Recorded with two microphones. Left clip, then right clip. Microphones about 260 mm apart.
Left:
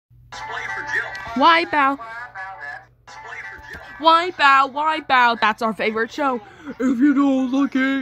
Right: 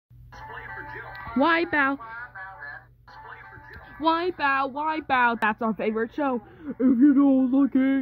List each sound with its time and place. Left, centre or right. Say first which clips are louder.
0.4 s music: left 10 dB; left
1.4 s speech: left 7 dB; centre
2.0 s a sound: left 6 dB; left
4.0 s speech: left 9 dB; centre